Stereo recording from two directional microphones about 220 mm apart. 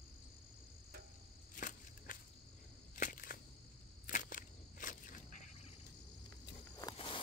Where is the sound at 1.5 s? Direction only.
35° left (ahead or behind).